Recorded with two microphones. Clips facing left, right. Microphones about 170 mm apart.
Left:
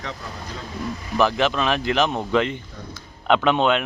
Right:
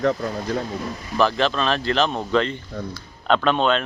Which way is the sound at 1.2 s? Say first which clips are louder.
Even; 15° left (ahead or behind).